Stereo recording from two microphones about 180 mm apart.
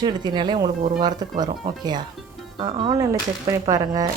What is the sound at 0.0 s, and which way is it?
A woman's voice, 25° right (ahead or behind).